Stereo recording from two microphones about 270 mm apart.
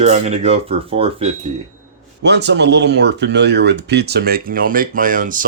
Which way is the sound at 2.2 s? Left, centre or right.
Right.